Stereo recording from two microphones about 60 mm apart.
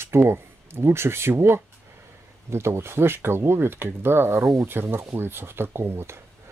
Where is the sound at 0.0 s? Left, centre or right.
Right.